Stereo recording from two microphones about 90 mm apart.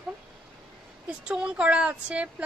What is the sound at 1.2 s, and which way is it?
A woman's voice, 10° right (ahead or behind).